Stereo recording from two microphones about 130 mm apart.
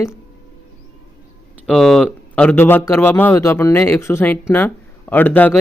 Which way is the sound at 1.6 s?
Centre (ahead or behind).